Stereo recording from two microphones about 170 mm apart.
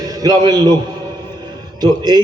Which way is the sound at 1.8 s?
25° right (ahead or behind).